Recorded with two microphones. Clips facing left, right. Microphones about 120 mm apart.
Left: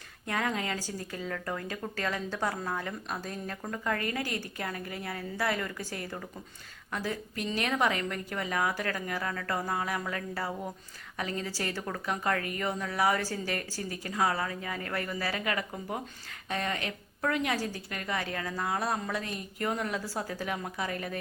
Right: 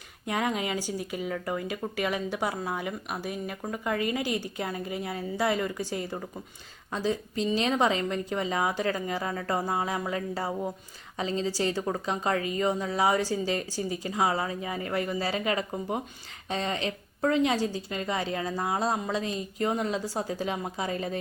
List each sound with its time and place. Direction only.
0.3 s a woman's voice: 15° right (ahead or behind)